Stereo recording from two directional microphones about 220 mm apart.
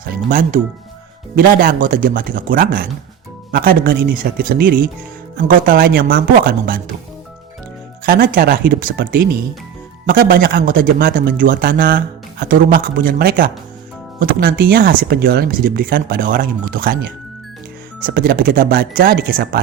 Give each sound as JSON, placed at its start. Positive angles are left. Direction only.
{"t": 0.3, "sound": "speech", "side_deg": -40}
{"t": 8.0, "sound": "speech", "side_deg": -40}
{"t": 18.0, "sound": "speech", "side_deg": -40}